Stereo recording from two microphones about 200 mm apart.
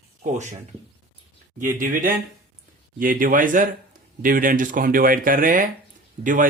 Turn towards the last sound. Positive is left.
turn(degrees=-40)  # may be behind; listen again after turning